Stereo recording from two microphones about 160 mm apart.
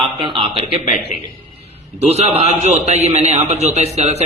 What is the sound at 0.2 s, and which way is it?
Speech, 35° right (ahead or behind).